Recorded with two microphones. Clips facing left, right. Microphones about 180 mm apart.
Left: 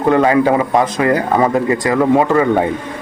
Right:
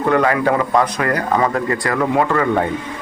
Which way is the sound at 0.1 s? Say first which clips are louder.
Left 4 dB; 25° left (ahead or behind).